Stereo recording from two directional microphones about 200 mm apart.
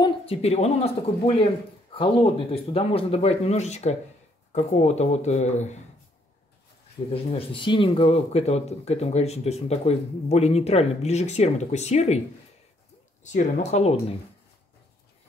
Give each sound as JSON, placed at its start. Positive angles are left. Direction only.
{"t": 0.0, "sound": "speech", "side_deg": 30}
{"t": 7.1, "sound": "speech", "side_deg": 30}
{"t": 13.2, "sound": "speech", "side_deg": 35}